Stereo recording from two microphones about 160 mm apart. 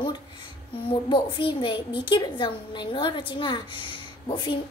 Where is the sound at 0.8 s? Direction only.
30° left (ahead or behind).